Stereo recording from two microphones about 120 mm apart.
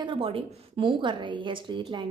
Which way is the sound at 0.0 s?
45° right (ahead or behind).